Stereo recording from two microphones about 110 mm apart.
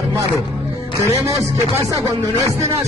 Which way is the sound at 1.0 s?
30° right (ahead or behind).